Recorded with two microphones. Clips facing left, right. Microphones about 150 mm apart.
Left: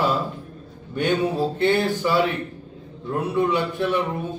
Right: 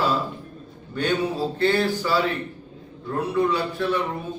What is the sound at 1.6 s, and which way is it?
Speech, 20° left (ahead or behind).